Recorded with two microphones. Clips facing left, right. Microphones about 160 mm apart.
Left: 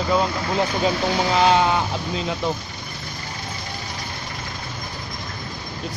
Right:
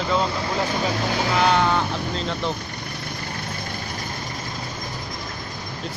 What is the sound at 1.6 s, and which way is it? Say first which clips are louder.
Speech: left 1 dB; 10° left (ahead or behind).